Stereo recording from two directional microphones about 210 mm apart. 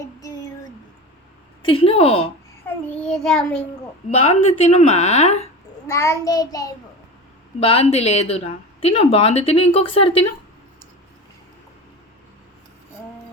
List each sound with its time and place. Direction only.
0.0 s a sound: 15° left (ahead or behind)
1.6 s speech: 25° left (ahead or behind)
2.6 s child singing: 5° left (ahead or behind)
4.3 s a woman's voice: 30° left (ahead or behind)
5.9 s child singing: 15° left (ahead or behind)
7.6 s speech: 30° left (ahead or behind)